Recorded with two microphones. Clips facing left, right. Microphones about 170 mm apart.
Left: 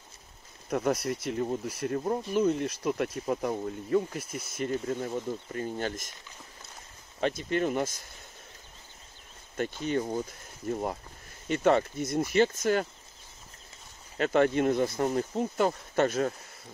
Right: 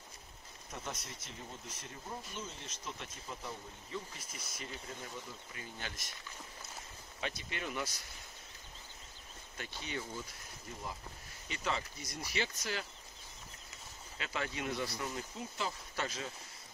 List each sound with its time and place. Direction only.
0.7 s speech: 65° left (ahead or behind)
4.3 s speech: 55° left (ahead or behind)
7.2 s speech: 50° left (ahead or behind)
9.6 s speech: 50° left (ahead or behind)
10.7 s speech: 60° left (ahead or behind)
14.1 s speech: 50° left (ahead or behind)